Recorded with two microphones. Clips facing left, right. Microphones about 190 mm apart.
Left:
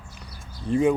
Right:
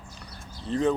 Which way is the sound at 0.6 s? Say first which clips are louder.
Left 4 dB; 10° left (ahead or behind).